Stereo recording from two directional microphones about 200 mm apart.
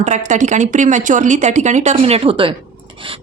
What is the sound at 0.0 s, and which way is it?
A woman's voice, 35° right (ahead or behind).